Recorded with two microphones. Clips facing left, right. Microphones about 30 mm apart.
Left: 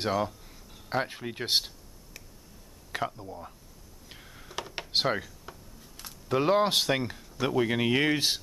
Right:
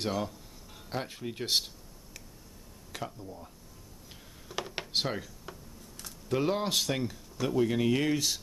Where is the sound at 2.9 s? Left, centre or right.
Left.